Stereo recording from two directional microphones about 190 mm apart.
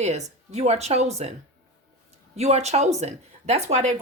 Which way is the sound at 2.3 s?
35° right (ahead or behind).